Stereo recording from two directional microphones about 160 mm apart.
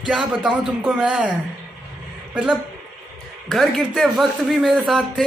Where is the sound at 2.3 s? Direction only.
5° right (ahead or behind).